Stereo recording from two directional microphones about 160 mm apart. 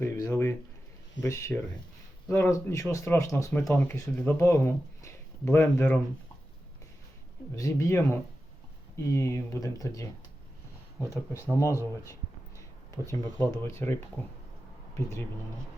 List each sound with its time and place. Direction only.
0.0 s speech: 15° left (ahead or behind)
7.5 s speech: 20° left (ahead or behind)
11.1 s speech: 20° left (ahead or behind)
13.1 s speech: 20° left (ahead or behind)